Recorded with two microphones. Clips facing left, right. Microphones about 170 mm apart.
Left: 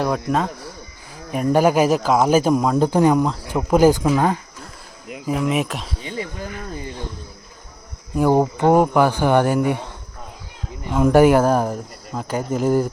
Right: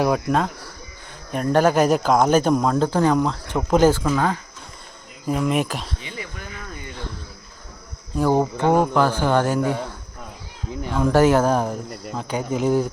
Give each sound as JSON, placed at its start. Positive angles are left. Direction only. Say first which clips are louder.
{"t": 0.0, "sound": "speech", "louder": "right 1 dB", "side_deg": 0}
{"t": 5.2, "sound": "speech", "louder": "even", "side_deg": 0}
{"t": 6.0, "sound": "a sound", "louder": "left 6 dB", "side_deg": 35}
{"t": 8.1, "sound": "speech", "louder": "left 3 dB", "side_deg": 10}
{"t": 11.0, "sound": "speech", "louder": "left 3 dB", "side_deg": 10}